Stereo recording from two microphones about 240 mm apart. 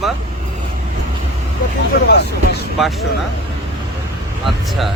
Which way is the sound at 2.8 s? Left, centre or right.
Centre.